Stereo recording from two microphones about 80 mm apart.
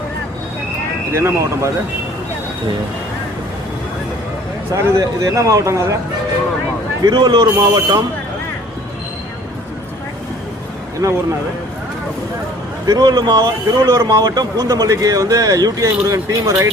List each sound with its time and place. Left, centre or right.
1.1 s a man's voice: right
4.7 s a man's voice: right
7.0 s a man's voice: right
11.0 s a man's voice: right
12.9 s a man's voice: right
13.8 s a man's voice: right
14.1 s speech: right